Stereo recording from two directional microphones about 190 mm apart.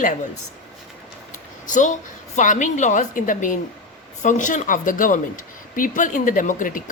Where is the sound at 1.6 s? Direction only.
40° left (ahead or behind).